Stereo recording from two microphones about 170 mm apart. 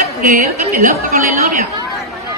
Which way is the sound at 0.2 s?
50° right (ahead or behind).